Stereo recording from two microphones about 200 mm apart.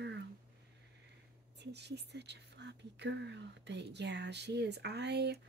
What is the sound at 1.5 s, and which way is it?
Speech, 55° right (ahead or behind).